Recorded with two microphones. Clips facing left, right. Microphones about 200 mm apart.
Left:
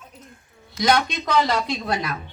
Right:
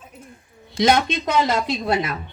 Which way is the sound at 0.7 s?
25° right (ahead or behind).